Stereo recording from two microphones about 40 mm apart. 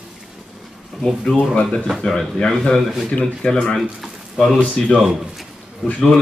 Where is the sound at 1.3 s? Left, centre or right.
Left.